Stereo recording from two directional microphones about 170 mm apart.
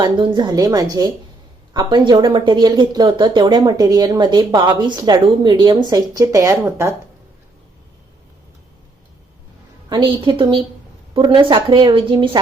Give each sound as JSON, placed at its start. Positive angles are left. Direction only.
{"t": 0.0, "sound": "speech", "side_deg": -25}
{"t": 9.9, "sound": "speech", "side_deg": -30}